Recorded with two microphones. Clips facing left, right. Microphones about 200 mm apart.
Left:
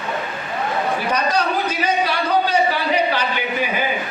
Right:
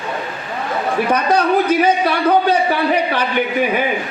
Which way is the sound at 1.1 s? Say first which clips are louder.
Right 7 dB; 55° right (ahead or behind).